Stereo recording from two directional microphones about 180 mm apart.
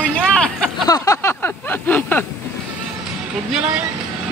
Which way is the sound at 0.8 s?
20° left (ahead or behind).